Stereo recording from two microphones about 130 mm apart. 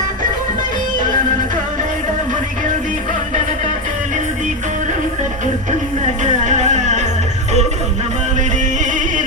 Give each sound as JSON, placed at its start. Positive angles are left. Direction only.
{"t": 6.2, "sound": "music", "side_deg": -65}
{"t": 8.4, "sound": "music", "side_deg": -75}